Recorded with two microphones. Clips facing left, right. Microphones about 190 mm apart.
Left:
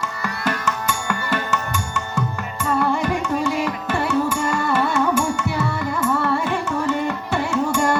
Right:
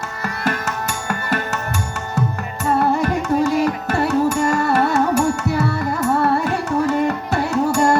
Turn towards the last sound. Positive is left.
turn(degrees=-40)  # may be behind; listen again after turning